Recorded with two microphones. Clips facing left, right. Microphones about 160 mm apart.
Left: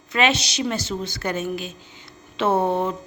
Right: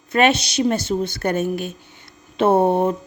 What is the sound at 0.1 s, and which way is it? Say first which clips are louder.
A woman's voice: right 4 dB; 55° right (ahead or behind).